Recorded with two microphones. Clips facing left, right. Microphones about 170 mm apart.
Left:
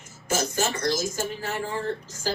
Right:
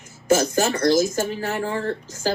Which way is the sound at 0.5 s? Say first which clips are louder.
Right 8 dB; 50° right (ahead or behind).